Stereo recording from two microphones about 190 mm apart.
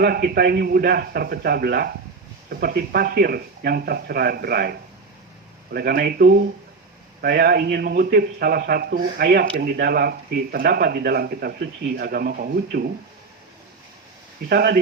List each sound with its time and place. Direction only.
0.0 s a man's voice: 55° right (ahead or behind)
5.7 s a man's voice: 55° right (ahead or behind)
14.5 s speech: 55° right (ahead or behind)